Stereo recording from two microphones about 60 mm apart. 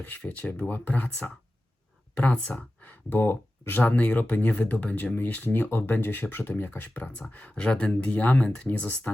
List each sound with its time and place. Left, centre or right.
0.2 s speech: left
3.8 s speech: left
5.5 s speech: left